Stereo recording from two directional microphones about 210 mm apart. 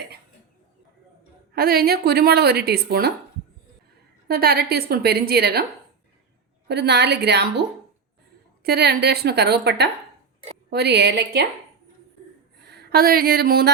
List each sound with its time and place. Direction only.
1.5 s a woman's voice: 45° right (ahead or behind)
4.3 s a woman's voice: 45° right (ahead or behind)
6.7 s a woman's voice: 55° right (ahead or behind)
8.6 s a woman's voice: 50° right (ahead or behind)
12.5 s a sound: 50° right (ahead or behind)